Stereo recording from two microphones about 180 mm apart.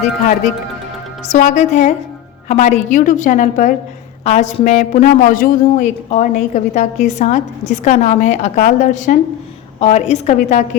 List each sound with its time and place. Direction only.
1.3 s a woman's voice: 45° left (ahead or behind)